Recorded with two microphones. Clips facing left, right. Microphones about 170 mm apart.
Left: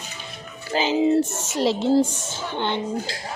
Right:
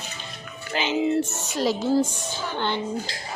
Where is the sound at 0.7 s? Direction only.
35° left (ahead or behind); by 2.8 s 20° left (ahead or behind).